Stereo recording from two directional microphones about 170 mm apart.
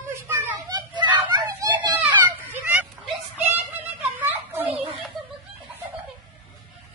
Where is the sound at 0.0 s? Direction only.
15° right (ahead or behind).